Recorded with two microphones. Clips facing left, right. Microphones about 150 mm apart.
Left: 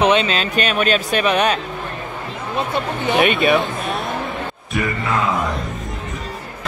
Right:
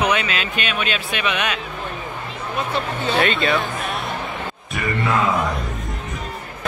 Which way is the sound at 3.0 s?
15° left (ahead or behind).